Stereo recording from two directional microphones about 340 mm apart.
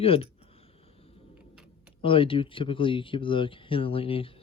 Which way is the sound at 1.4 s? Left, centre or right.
Centre.